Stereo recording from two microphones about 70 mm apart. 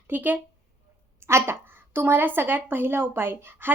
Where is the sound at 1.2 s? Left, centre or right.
Right.